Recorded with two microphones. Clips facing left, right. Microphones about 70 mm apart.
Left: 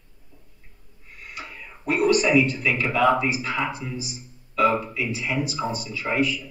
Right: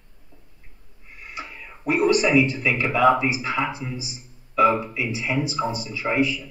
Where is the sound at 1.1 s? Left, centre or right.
Right.